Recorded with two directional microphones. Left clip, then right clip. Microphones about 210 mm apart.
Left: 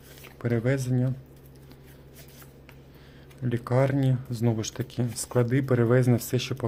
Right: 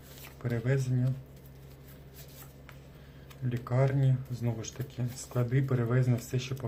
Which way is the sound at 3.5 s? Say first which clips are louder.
Left 6 dB; 45° left (ahead or behind).